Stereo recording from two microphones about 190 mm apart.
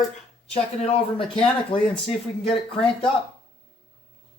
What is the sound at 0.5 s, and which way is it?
Speech, 30° left (ahead or behind).